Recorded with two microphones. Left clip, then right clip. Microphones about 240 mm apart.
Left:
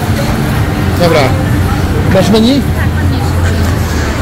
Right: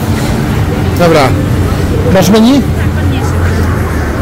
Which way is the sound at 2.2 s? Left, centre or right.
Right.